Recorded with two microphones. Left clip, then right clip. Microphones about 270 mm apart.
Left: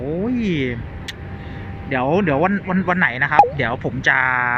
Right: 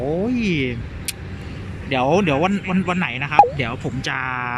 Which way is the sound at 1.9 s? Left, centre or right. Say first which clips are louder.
Right 1 dB; centre.